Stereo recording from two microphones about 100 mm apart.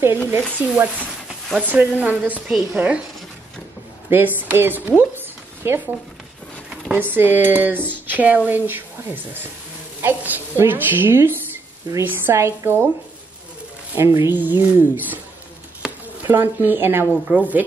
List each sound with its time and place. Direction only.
0.6 s a woman's voice: 15° right (ahead or behind)
4.1 s speech: 20° right (ahead or behind)
6.9 s a woman's voice: 20° right (ahead or behind)
13.9 s speech: 30° right (ahead or behind)
15.8 s a sound: 5° right (ahead or behind)
16.3 s speech: 20° right (ahead or behind)